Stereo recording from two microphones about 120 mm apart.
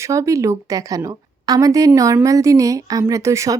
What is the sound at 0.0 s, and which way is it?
Speech, 25° right (ahead or behind).